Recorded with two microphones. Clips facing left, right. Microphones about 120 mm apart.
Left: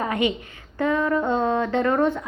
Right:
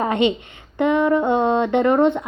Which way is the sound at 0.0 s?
25° right (ahead or behind).